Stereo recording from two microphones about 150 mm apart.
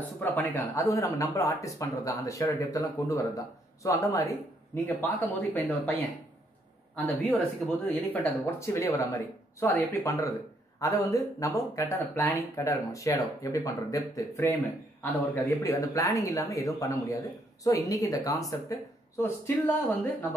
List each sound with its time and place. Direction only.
0.2 s speech: 15° left (ahead or behind)
7.1 s speech: centre (ahead or behind)
7.9 s speech: 10° left (ahead or behind)
19.4 s speech: 15° left (ahead or behind)